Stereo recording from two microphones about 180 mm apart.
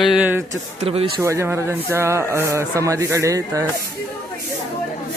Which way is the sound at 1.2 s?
15° right (ahead or behind).